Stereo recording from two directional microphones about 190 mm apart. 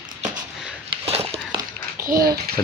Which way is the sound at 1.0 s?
30° right (ahead or behind).